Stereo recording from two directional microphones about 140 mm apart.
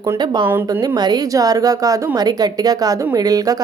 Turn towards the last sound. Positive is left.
turn(degrees=-25)  # may be behind; listen again after turning